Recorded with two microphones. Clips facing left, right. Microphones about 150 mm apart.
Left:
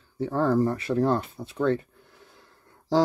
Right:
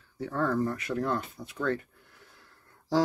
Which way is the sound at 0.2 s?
30° left (ahead or behind).